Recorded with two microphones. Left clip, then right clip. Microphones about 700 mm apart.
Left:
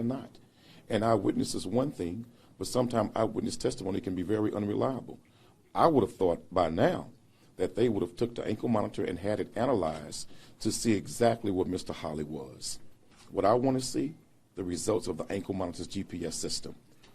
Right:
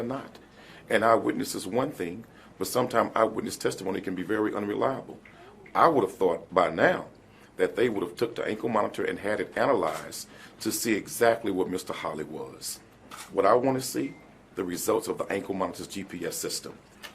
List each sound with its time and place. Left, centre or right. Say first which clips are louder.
0.9 s speech: right 5 dB; left